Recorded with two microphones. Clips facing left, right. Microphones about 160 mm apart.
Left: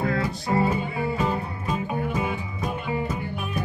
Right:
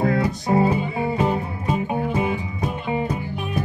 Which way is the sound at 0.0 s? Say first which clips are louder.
Right 5 dB; 20° right (ahead or behind).